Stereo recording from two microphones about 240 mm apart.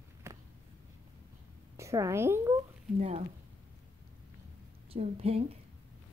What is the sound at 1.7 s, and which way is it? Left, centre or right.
Speech, centre.